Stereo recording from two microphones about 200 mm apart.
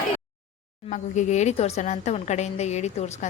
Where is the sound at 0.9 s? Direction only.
35° left (ahead or behind).